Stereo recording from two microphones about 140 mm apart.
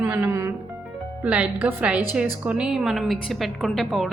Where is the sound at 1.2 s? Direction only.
10° right (ahead or behind).